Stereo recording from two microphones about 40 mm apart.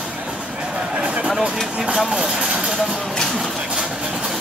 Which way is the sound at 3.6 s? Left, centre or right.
Centre.